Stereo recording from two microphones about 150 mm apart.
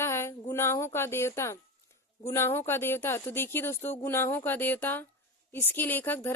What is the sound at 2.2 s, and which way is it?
Speech, 15° left (ahead or behind).